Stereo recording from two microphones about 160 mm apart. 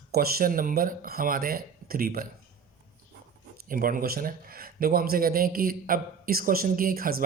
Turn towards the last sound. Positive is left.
turn(degrees=-65)  # may be behind; listen again after turning